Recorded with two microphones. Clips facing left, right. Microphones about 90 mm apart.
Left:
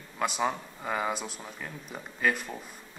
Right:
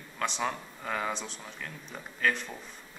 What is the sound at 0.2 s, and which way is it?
Speech, 10° left (ahead or behind).